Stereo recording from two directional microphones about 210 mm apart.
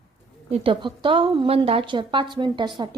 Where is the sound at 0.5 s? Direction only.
25° right (ahead or behind).